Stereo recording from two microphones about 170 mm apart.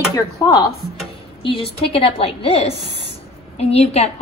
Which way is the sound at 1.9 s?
30° left (ahead or behind).